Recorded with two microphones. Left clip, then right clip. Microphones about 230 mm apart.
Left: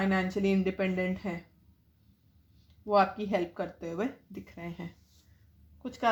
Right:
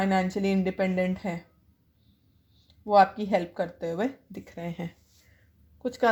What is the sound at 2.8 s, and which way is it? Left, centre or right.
Speech, right.